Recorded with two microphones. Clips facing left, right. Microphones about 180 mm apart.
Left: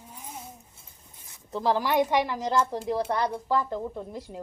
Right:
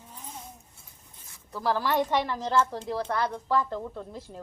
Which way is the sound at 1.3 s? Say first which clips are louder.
Left 3 dB; 20° left (ahead or behind).